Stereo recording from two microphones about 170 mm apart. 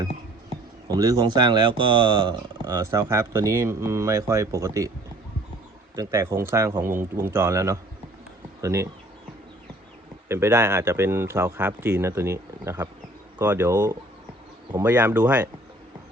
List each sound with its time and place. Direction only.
0.9 s speech: 20° right (ahead or behind)
6.0 s speech: 15° right (ahead or behind)
10.2 s speech: 15° right (ahead or behind)